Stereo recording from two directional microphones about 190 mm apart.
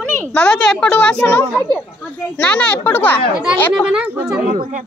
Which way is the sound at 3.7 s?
5° right (ahead or behind).